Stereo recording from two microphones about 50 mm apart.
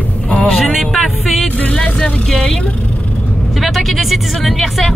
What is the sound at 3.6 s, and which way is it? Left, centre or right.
Speech, centre.